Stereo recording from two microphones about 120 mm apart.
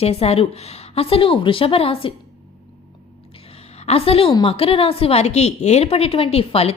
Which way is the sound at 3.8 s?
55° left (ahead or behind).